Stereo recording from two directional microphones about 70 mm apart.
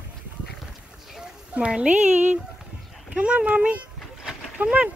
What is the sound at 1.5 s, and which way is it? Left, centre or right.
Speech, centre.